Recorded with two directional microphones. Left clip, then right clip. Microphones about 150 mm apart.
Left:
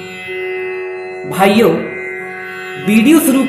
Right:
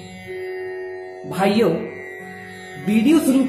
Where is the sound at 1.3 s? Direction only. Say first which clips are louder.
Left 8 dB; 35° right (ahead or behind).